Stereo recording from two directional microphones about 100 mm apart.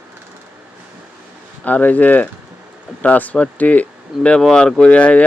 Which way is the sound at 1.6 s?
15° left (ahead or behind).